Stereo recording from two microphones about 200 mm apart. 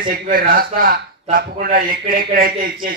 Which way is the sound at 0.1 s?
45° right (ahead or behind).